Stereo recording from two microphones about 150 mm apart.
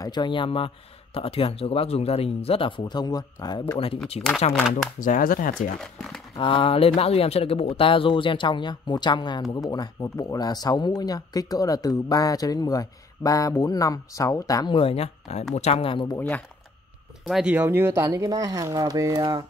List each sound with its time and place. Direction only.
0.0 s speech: 30° left (ahead or behind)
5.0 s speech: 65° left (ahead or behind)
6.3 s speech: 35° left (ahead or behind)
16.2 s speech: 10° left (ahead or behind)
17.3 s speech: 5° right (ahead or behind); by 19.4 s 25° right (ahead or behind)